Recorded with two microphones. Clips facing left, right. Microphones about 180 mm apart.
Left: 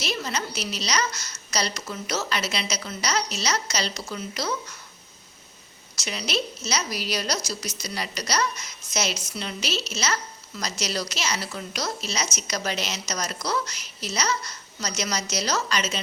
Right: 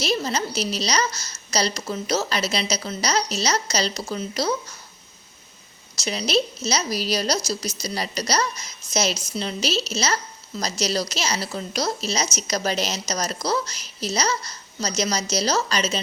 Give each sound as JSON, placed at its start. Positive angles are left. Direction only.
{"t": 0.0, "sound": "a woman's voice", "side_deg": -35}
{"t": 6.1, "sound": "a woman's voice", "side_deg": -35}